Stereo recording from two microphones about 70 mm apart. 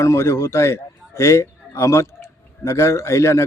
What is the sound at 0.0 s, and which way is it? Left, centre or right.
A man's voice, left.